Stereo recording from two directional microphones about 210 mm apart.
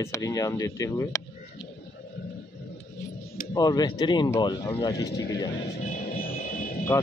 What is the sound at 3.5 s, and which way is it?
Speech, 15° left (ahead or behind).